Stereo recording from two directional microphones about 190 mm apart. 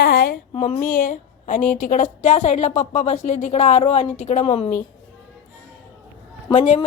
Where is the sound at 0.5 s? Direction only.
35° left (ahead or behind).